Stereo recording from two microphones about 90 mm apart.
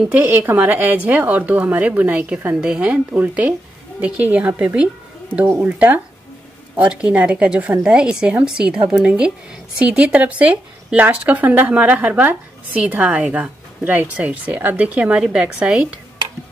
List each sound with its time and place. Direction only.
0.1 s speech: 20° right (ahead or behind)